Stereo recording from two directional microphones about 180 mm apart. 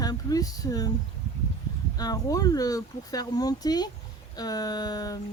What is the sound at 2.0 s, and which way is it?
Speech, 20° left (ahead or behind).